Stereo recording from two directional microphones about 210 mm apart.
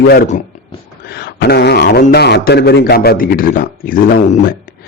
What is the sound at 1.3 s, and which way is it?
A man's voice, 50° left (ahead or behind).